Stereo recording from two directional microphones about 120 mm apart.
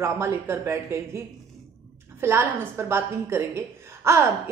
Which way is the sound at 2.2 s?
20° right (ahead or behind).